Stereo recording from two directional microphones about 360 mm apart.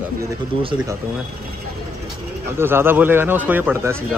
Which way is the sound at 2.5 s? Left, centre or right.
Centre.